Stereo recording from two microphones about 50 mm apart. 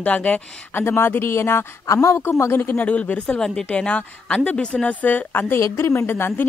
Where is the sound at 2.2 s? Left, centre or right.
Left.